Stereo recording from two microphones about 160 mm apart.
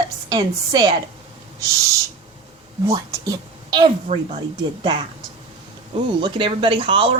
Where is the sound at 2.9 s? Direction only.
25° right (ahead or behind).